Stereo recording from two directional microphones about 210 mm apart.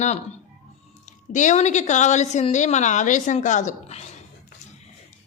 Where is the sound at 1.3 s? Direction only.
35° left (ahead or behind).